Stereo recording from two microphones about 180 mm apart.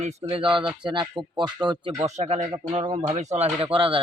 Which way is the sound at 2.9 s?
25° right (ahead or behind).